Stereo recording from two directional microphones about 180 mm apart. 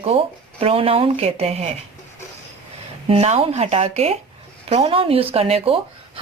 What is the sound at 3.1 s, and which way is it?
A woman's voice, 35° right (ahead or behind).